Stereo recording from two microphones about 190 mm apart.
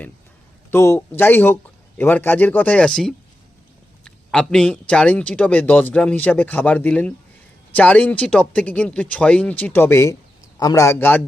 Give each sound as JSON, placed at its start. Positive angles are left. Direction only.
{"t": 0.7, "sound": "a man's voice", "side_deg": 15}